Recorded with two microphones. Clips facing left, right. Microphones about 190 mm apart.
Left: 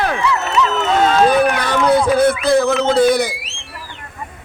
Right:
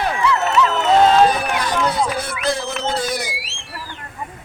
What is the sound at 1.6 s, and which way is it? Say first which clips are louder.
Speech: left 6 dB; 60° left (ahead or behind).